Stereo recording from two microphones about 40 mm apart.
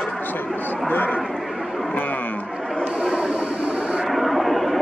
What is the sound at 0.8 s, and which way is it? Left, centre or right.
Speech, left.